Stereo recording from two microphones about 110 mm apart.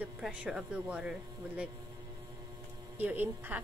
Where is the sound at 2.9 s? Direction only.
15° right (ahead or behind).